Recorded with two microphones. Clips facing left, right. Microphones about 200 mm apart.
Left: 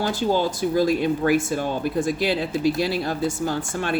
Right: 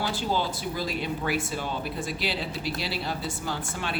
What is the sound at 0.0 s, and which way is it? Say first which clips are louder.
Speech: left 6 dB; 45° left (ahead or behind).